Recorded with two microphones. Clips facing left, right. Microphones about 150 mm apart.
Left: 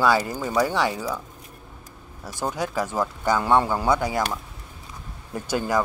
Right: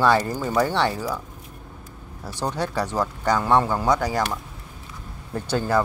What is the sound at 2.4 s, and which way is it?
Speech, 10° left (ahead or behind).